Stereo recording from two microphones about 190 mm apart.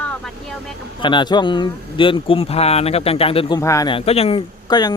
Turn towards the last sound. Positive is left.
turn(degrees=20)  # may be behind; listen again after turning